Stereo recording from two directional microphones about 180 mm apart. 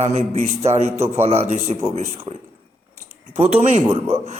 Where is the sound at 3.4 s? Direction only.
35° right (ahead or behind).